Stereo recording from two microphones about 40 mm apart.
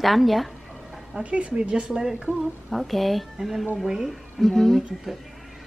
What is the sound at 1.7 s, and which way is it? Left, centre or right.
Speech, centre.